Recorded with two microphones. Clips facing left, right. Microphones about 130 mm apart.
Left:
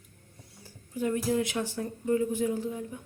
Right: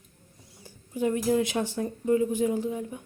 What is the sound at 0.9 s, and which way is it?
Speech, 20° right (ahead or behind).